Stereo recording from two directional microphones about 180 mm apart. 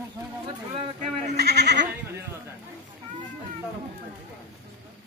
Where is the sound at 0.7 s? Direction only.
40° right (ahead or behind).